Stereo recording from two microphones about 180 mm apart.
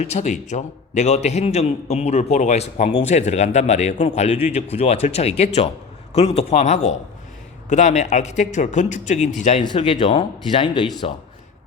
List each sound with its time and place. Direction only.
0.0 s a man's voice: 40° left (ahead or behind)
9.6 s speech: 30° left (ahead or behind)